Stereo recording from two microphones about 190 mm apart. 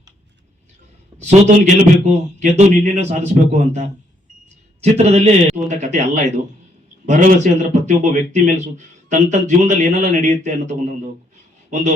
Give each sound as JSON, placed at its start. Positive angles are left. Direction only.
{"t": 1.2, "sound": "speech", "side_deg": -40}